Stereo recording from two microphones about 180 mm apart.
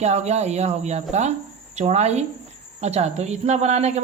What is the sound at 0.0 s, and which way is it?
A woman's voice, 40° right (ahead or behind).